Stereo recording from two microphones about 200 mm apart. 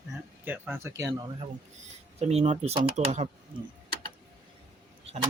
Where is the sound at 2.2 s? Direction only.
30° right (ahead or behind).